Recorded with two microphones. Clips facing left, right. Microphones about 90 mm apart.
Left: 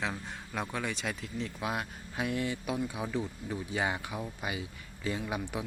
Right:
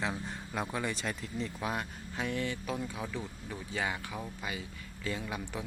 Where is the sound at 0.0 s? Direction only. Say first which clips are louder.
Right 1 dB; centre (ahead or behind).